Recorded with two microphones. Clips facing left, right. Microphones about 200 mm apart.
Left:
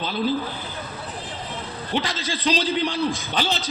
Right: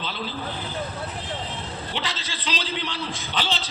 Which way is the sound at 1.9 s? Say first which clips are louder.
Left 10 dB; 45° left (ahead or behind).